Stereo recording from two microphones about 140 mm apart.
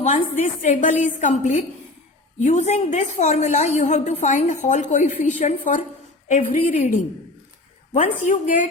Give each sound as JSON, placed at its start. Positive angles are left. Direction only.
{"t": 0.6, "sound": "a woman's voice", "side_deg": 60}